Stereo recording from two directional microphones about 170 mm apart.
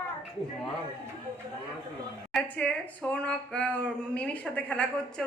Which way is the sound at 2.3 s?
5° left (ahead or behind).